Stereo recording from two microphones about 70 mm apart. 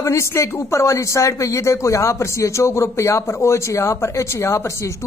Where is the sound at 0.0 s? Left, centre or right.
Left.